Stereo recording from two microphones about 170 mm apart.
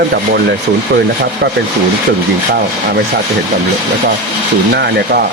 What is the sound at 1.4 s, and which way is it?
Speech, 90° right.